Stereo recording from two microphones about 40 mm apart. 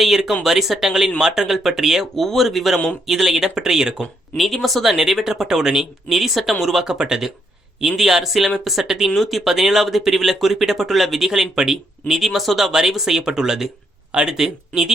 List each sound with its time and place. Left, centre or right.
0.0 s speech: centre
3.2 s speech: centre
4.4 s speech: centre
6.8 s speech: centre
7.8 s speech: centre
9.0 s speech: centre
9.4 s speech: centre
11.3 s speech: centre